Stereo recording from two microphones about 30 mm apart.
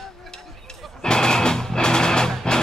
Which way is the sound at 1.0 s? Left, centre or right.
Left.